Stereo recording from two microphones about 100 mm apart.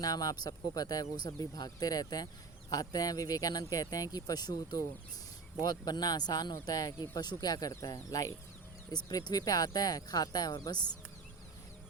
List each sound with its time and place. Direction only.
0.0 s speech: 35° left (ahead or behind)